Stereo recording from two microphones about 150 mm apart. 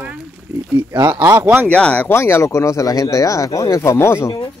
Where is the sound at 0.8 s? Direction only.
20° right (ahead or behind).